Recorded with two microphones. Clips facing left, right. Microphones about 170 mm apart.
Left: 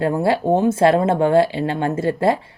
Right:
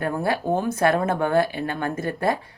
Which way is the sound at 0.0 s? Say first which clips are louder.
Left 6 dB; 25° left (ahead or behind).